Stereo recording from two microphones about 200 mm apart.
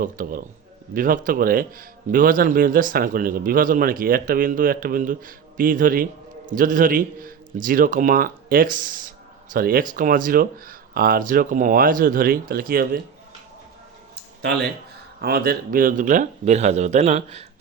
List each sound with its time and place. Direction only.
0.0 s speech: 45° right (ahead or behind)
15.2 s a man's voice: 50° right (ahead or behind); by 17.4 s 35° right (ahead or behind)